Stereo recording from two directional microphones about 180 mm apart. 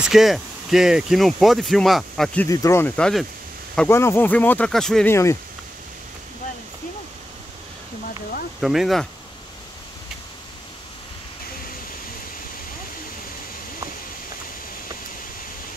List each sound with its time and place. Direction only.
0.0 s speech: centre (ahead or behind)
2.4 s speech: 15° left (ahead or behind)
3.0 s speech: centre (ahead or behind)
5.1 s speech: 15° left (ahead or behind)
8.5 s speech: centre (ahead or behind)